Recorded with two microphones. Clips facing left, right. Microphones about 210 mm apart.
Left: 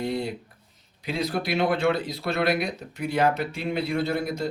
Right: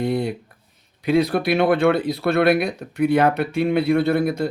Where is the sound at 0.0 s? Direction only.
55° right (ahead or behind).